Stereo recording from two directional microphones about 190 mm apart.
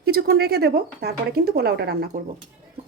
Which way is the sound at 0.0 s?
55° right (ahead or behind).